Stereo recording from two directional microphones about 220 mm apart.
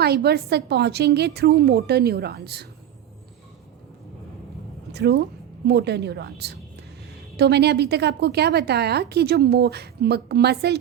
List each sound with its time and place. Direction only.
0.0 s a woman's voice: 45° right (ahead or behind)
4.9 s a woman's voice: 50° right (ahead or behind)